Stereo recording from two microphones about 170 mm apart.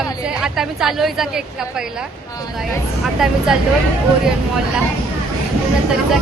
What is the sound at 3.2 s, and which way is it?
Speech, centre (ahead or behind).